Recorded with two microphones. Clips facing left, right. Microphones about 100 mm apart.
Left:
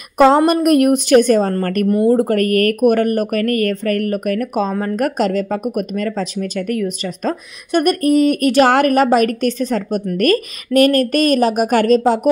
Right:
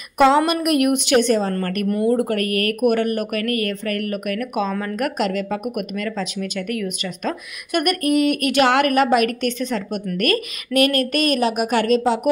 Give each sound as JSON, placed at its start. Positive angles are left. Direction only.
{"t": 0.5, "sound": "a woman's voice", "side_deg": 40}
{"t": 1.9, "sound": "speech", "side_deg": 25}
{"t": 2.1, "sound": "a woman's voice", "side_deg": 40}